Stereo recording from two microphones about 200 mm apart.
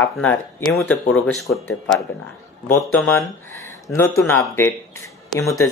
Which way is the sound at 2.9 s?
10° left (ahead or behind).